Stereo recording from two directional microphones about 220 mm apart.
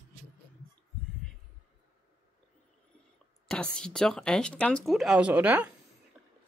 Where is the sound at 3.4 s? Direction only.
5° left (ahead or behind).